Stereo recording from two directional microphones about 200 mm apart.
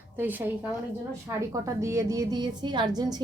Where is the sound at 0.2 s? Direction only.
10° right (ahead or behind).